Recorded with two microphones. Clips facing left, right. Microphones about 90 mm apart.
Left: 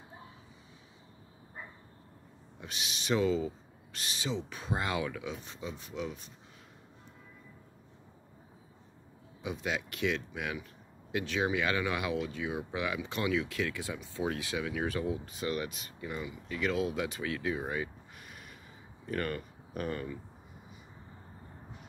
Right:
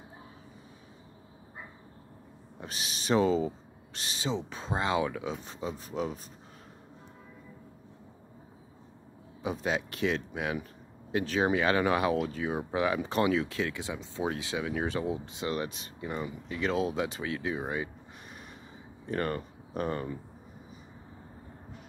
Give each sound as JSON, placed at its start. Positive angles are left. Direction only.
{"t": 2.6, "sound": "speech", "side_deg": -35}
{"t": 9.4, "sound": "speech", "side_deg": -35}
{"t": 19.0, "sound": "speech", "side_deg": -30}